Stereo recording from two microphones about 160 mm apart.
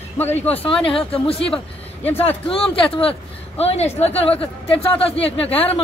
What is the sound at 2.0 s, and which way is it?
Speech, 10° left (ahead or behind).